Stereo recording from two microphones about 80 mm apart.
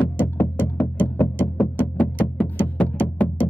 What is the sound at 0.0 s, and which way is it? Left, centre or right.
Music, centre.